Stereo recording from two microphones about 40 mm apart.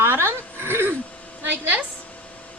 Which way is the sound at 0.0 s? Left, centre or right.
Right.